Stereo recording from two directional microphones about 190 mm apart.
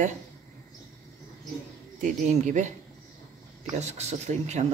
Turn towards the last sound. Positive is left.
turn(degrees=-35)  # may be behind; listen again after turning